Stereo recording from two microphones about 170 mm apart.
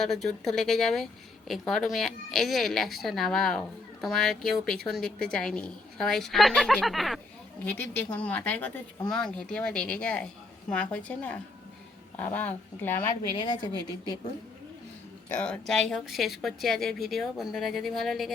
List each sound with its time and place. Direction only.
0.0 s a woman's voice: centre (ahead or behind)
13.3 s speech: 25° left (ahead or behind)
15.3 s a woman's voice: 5° left (ahead or behind)